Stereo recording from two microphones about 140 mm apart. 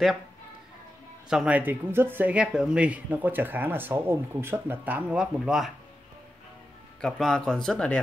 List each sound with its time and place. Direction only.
1.3 s speech: 10° right (ahead or behind)
7.0 s speech: 5° left (ahead or behind)